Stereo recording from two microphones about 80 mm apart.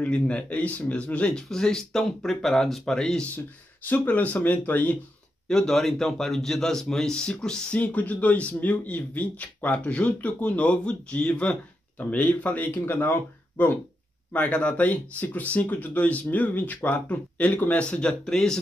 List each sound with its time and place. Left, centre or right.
0.0 s speech: centre
3.9 s speech: centre
5.5 s speech: centre